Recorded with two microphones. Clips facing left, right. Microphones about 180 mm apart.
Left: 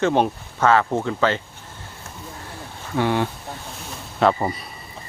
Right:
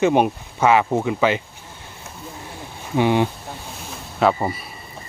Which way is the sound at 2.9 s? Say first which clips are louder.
Right 3 dB; 15° right (ahead or behind).